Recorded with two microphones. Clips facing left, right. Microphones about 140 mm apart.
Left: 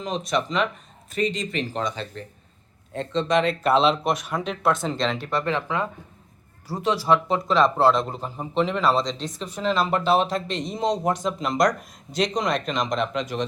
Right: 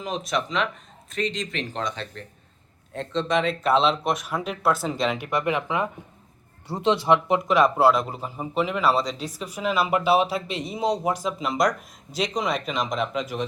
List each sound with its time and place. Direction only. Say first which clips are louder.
0.0 s a man's voice: left 2 dB; centre (ahead or behind)